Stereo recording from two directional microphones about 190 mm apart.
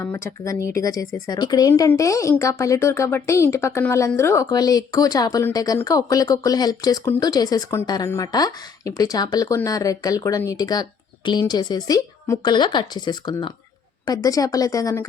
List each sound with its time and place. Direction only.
0.0 s speech: 10° left (ahead or behind)